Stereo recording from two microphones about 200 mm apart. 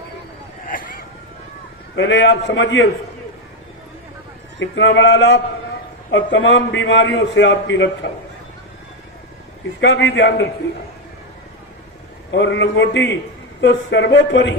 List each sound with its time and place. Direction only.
0.7 s vehicle: 45° left (ahead or behind)
2.0 s a man's voice: 65° left (ahead or behind)
4.6 s a man's voice: 70° left (ahead or behind)
9.8 s a man's voice: 65° left (ahead or behind)
12.3 s a man's voice: 65° left (ahead or behind)